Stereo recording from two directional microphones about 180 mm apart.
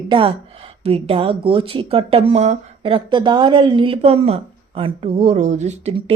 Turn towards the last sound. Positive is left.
turn(degrees=-35)  # may be behind; listen again after turning